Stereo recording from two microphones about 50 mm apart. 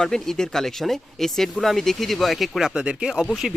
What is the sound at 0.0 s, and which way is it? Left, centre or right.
Speech, centre.